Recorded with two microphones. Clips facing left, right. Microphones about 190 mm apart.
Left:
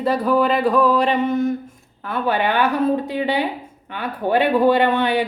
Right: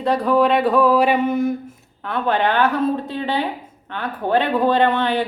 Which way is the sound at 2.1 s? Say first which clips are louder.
Right 1 dB; 5° left (ahead or behind).